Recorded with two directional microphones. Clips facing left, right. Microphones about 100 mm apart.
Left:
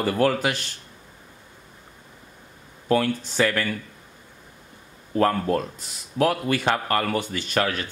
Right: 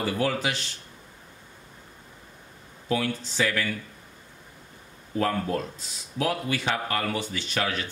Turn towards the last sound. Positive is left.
turn(degrees=50)  # may be behind; listen again after turning